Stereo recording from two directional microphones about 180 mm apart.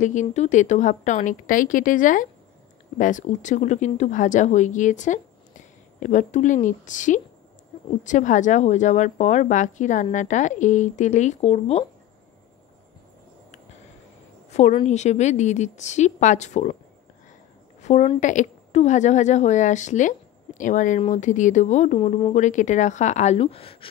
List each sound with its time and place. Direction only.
0.0 s speech: 40° left (ahead or behind)
14.5 s a woman's voice: 35° left (ahead or behind)
17.8 s a woman's voice: 40° left (ahead or behind)